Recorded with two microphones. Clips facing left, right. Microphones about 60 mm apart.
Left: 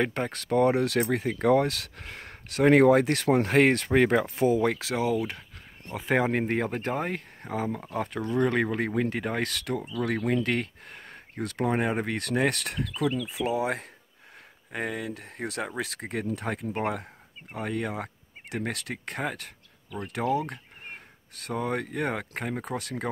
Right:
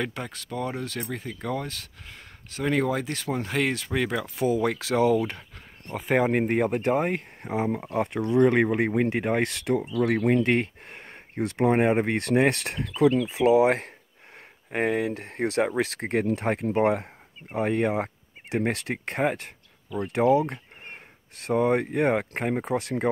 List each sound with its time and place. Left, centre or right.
0.3 s speech: left
4.6 s speech: centre
4.9 s speech: centre
5.9 s speech: centre; by 13.5 s right
14.7 s speech: right
16.8 s speech: right